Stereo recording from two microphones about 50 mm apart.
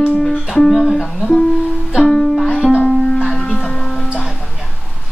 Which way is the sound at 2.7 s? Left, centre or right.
Centre.